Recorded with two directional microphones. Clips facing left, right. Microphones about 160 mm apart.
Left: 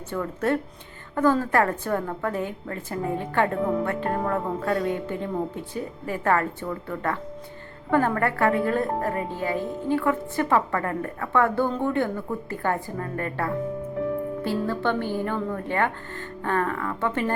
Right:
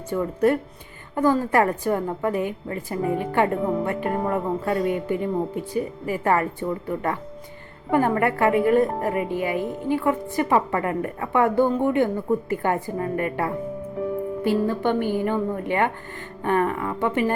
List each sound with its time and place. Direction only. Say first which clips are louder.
0.1 s speech: right 4 dB; 15° right (ahead or behind)